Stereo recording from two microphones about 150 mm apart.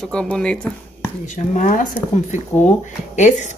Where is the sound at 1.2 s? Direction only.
60° left (ahead or behind).